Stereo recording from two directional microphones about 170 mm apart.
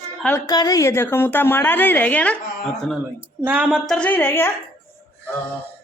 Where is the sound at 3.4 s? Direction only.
10° right (ahead or behind).